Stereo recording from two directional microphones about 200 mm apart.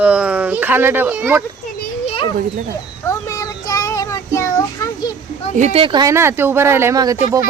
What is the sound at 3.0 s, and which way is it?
Child singing, 15° left (ahead or behind).